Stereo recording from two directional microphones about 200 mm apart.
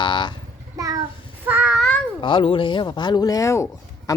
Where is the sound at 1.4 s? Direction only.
5° right (ahead or behind).